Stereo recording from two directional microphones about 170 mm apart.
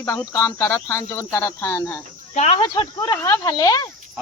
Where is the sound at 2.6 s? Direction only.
25° left (ahead or behind).